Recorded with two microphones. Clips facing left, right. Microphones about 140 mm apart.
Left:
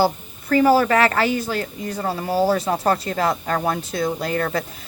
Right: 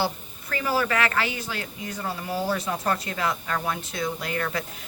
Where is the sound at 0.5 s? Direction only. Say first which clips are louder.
Left 10 dB; 40° left (ahead or behind).